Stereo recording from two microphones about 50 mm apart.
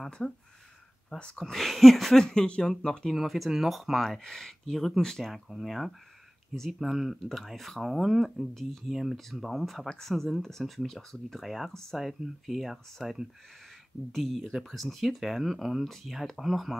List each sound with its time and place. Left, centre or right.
0.2 s speech: centre
1.4 s speech: centre
3.1 s speech: centre
4.2 s speech: centre
11.4 s speech: centre